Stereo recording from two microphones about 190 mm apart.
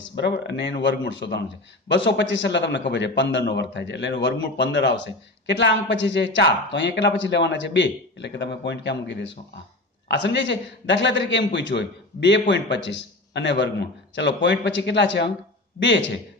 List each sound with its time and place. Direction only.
0.0 s a man's voice: 65° left (ahead or behind)